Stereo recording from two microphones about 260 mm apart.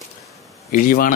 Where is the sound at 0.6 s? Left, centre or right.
Left.